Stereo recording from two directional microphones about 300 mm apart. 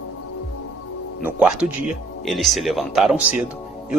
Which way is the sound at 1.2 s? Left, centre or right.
Centre.